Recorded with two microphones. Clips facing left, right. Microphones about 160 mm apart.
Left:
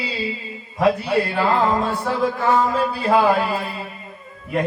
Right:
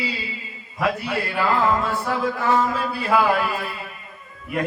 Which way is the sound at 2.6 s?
30° left (ahead or behind).